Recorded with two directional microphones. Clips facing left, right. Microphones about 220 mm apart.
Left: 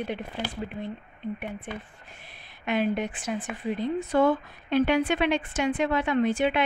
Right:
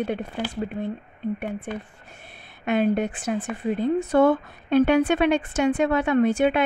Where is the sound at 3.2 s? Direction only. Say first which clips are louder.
Right 5 dB; 60° right (ahead or behind).